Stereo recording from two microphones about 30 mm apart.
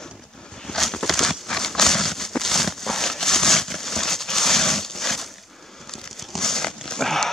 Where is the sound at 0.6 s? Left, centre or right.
Centre.